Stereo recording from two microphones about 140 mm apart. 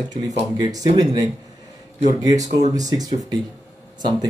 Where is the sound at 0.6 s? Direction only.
25° right (ahead or behind).